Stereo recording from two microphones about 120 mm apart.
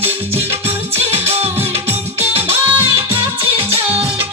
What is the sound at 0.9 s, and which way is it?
Music, 55° right (ahead or behind).